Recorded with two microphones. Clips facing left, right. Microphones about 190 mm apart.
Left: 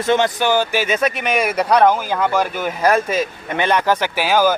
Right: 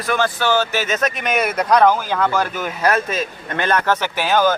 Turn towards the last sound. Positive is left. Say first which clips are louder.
# left 1 dB
turn(degrees=10)  # may be behind; listen again after turning